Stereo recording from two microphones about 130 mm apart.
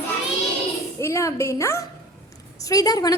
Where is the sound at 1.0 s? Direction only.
20° left (ahead or behind).